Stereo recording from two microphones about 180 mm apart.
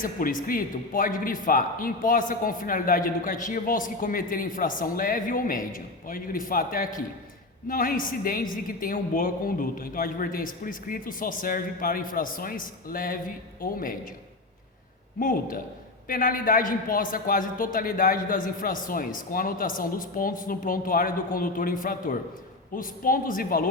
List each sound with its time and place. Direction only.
0.0 s speech: 50° left (ahead or behind)
15.2 s speech: 50° left (ahead or behind)